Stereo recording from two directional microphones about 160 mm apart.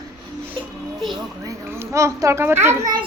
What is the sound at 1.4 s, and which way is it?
A child's voice, 20° right (ahead or behind).